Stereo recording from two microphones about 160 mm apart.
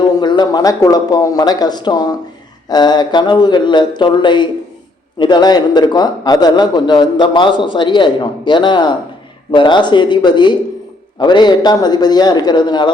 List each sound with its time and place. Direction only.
0.0 s a man's voice: 30° left (ahead or behind)